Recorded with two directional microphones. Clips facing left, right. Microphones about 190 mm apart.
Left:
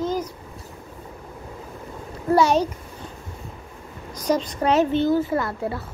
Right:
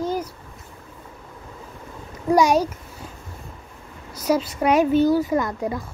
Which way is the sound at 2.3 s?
10° right (ahead or behind).